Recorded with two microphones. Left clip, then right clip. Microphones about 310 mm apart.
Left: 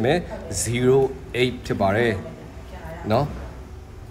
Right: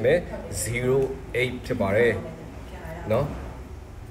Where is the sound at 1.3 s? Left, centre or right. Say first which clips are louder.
Left 3 dB; left.